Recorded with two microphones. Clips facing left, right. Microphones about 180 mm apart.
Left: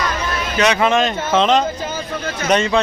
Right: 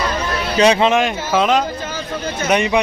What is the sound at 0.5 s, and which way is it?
Speech, 30° right (ahead or behind).